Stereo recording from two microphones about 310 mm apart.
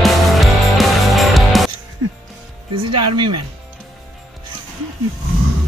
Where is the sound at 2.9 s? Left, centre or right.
Right.